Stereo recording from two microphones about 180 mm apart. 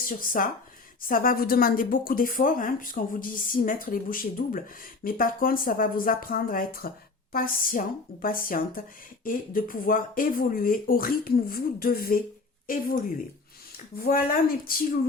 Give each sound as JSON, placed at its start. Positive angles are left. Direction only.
{"t": 0.0, "sound": "speech", "side_deg": 50}